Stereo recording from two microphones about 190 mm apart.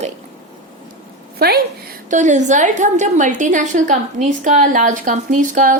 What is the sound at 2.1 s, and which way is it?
A woman's voice, 40° right (ahead or behind).